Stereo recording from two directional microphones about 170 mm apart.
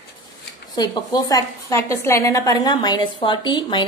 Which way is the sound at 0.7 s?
25° left (ahead or behind).